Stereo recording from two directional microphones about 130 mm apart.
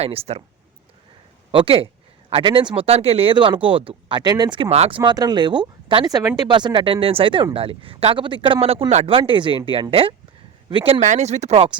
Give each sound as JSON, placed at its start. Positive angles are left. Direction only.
{"t": 0.0, "sound": "speech", "side_deg": -50}
{"t": 1.5, "sound": "speech", "side_deg": -45}
{"t": 4.7, "sound": "speech", "side_deg": -55}
{"t": 4.9, "sound": "speech", "side_deg": -35}
{"t": 9.0, "sound": "speech", "side_deg": -40}
{"t": 11.0, "sound": "speech", "side_deg": -65}